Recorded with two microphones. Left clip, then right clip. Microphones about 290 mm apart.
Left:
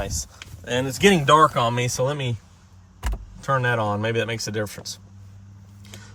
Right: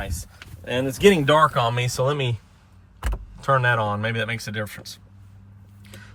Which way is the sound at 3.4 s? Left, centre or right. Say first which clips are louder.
Right 2 dB; centre.